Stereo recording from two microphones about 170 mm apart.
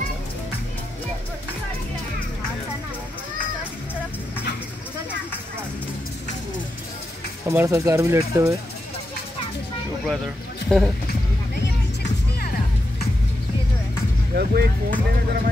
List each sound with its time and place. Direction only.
7.4 s speech: 15° right (ahead or behind)
10.0 s speech: centre (ahead or behind)
11.5 s music: 85° left
14.3 s speech: 65° right (ahead or behind)